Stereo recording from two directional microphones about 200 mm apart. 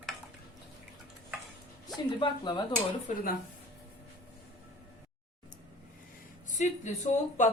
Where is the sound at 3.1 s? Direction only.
40° left (ahead or behind).